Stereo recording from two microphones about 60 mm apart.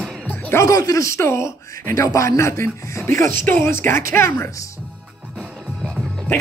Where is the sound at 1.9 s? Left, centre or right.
Left.